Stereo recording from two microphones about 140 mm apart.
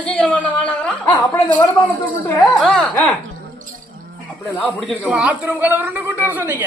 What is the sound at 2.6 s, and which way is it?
Jingle bell, 5° left (ahead or behind).